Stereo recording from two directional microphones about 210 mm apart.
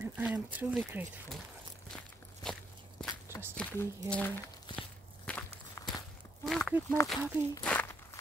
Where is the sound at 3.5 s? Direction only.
5° left (ahead or behind).